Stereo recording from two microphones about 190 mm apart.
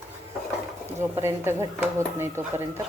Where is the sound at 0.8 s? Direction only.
15° right (ahead or behind).